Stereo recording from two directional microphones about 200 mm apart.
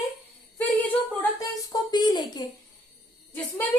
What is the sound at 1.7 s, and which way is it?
Speech, 20° left (ahead or behind).